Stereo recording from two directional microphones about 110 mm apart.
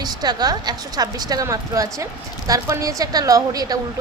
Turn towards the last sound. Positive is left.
turn(degrees=-35)  # may be behind; listen again after turning